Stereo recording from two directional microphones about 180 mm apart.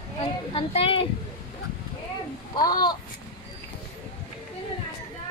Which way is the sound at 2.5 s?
25° left (ahead or behind).